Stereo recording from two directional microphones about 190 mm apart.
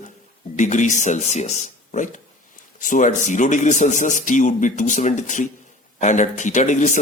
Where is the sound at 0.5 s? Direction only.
40° left (ahead or behind).